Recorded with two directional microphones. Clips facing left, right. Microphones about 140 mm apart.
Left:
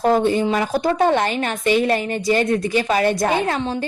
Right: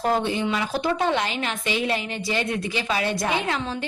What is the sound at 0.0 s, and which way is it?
A woman's voice, 45° left (ahead or behind).